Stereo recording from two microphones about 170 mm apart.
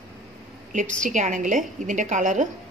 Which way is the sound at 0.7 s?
50° right (ahead or behind).